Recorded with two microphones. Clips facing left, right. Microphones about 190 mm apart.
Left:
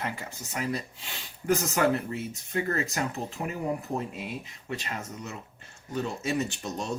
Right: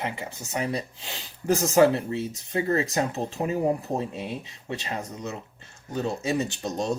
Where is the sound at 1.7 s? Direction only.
30° right (ahead or behind).